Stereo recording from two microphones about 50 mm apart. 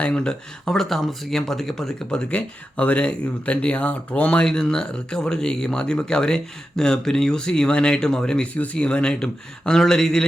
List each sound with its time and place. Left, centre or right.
0.0 s speech: left
0.7 s speech: centre
2.0 s speech: left